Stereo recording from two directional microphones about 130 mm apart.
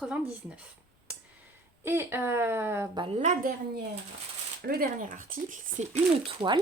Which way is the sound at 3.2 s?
70° right (ahead or behind).